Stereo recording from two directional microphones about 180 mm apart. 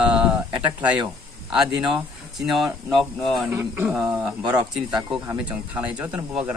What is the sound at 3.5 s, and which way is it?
Speech, 10° right (ahead or behind).